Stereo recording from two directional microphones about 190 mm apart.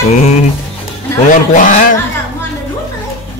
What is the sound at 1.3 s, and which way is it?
Speech, 45° left (ahead or behind).